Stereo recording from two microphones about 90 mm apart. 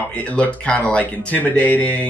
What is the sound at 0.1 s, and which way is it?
Speech, 15° left (ahead or behind).